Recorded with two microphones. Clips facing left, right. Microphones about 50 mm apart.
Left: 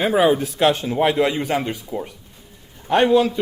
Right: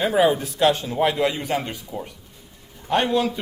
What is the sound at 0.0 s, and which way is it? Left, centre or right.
A man's voice, left.